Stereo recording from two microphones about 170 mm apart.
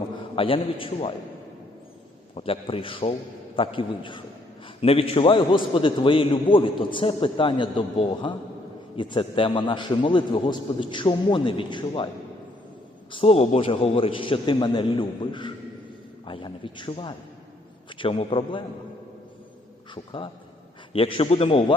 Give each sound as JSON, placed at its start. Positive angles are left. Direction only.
{"t": 0.3, "sound": "a man's voice", "side_deg": 30}
{"t": 2.3, "sound": "a man's voice", "side_deg": 35}
{"t": 13.1, "sound": "a man's voice", "side_deg": 35}
{"t": 19.9, "sound": "a man's voice", "side_deg": 30}